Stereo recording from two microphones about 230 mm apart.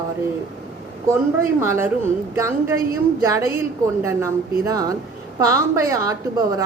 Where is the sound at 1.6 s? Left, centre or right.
Centre.